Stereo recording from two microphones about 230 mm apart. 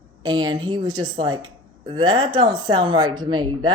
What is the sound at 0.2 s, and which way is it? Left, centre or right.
A woman's voice, centre.